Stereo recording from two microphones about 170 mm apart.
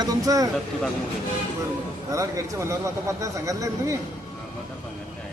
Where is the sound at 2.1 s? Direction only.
20° right (ahead or behind).